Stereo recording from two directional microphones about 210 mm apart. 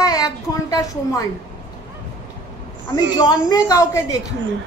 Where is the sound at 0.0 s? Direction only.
15° left (ahead or behind).